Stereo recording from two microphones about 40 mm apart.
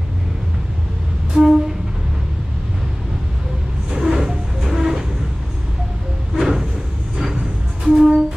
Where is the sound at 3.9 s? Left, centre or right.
Centre.